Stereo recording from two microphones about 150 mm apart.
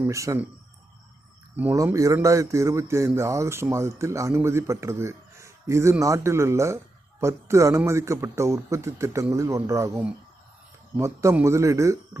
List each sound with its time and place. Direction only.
0.0 s speech: 20° right (ahead or behind)
1.5 s speech: 15° right (ahead or behind)